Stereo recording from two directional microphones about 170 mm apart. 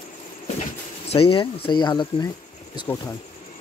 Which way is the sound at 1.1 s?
35° left (ahead or behind).